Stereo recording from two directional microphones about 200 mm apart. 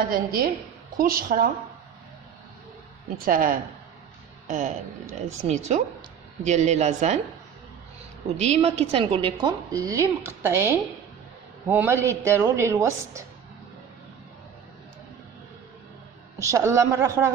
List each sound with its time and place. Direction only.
0.1 s a woman's voice: 45° right (ahead or behind)
3.3 s a woman's voice: 45° right (ahead or behind)
8.4 s a woman's voice: 30° right (ahead or behind); by 13.2 s 15° right (ahead or behind)
16.3 s a woman's voice: 15° right (ahead or behind)